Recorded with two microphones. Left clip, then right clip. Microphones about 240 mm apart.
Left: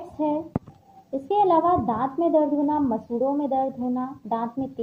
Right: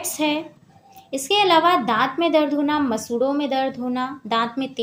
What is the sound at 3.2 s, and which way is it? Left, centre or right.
Speech, right.